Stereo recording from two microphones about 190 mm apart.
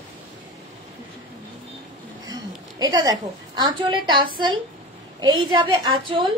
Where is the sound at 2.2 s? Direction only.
20° right (ahead or behind).